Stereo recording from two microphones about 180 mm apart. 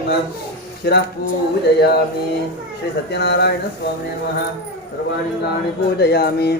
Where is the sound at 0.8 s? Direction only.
65° left (ahead or behind).